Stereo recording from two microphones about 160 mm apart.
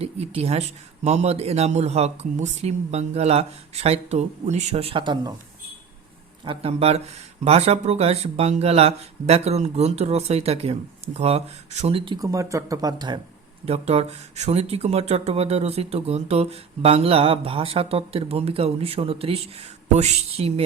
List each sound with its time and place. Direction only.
0.0 s speech: 40° right (ahead or behind)
6.4 s speech: 35° right (ahead or behind)
12.2 s speech: 20° right (ahead or behind)
13.7 s speech: 40° right (ahead or behind)